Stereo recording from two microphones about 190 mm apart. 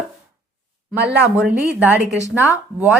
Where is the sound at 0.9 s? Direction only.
65° right (ahead or behind).